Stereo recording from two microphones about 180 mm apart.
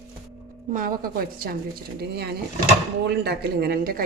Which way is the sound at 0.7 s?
50° right (ahead or behind).